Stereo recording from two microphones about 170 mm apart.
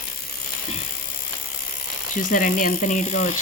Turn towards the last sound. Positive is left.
turn(degrees=45)  # may be behind; listen again after turning